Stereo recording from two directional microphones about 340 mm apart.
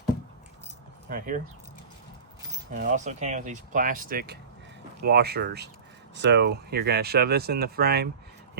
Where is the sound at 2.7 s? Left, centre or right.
Right.